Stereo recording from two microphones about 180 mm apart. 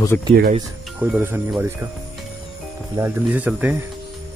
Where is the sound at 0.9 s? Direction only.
10° right (ahead or behind).